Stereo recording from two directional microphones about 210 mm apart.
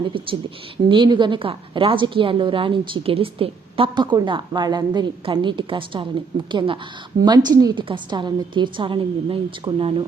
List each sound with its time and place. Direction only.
0.0 s a woman's voice: 25° right (ahead or behind)